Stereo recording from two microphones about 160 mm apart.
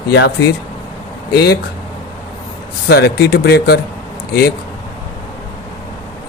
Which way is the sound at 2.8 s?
90° left.